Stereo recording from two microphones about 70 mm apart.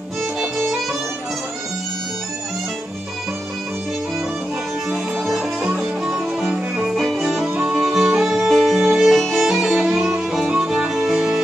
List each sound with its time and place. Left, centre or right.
5.8 s music: centre
7.0 s music: centre
7.4 s music: right
7.8 s music: centre